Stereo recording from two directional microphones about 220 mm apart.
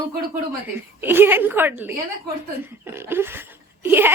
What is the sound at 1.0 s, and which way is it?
Speech, 10° right (ahead or behind).